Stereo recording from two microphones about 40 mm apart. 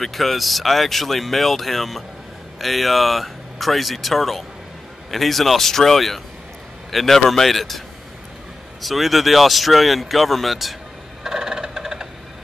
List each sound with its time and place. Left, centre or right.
0.0 s speech: centre
8.8 s speech: centre
11.2 s a sound: centre